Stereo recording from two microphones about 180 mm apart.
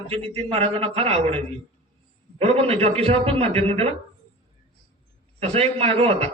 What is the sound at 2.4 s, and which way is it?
A man's voice, 35° right (ahead or behind).